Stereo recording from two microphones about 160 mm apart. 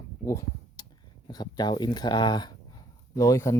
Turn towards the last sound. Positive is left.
turn(degrees=20)  # may be behind; listen again after turning